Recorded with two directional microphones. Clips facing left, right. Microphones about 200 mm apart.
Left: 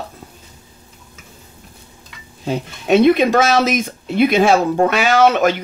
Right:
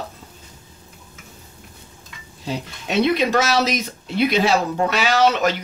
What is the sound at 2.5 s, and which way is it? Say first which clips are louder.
Speech: left 10 dB; 50° left (ahead or behind).